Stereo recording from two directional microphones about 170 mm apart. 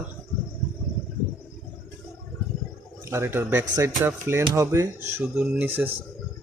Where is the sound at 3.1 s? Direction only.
15° right (ahead or behind).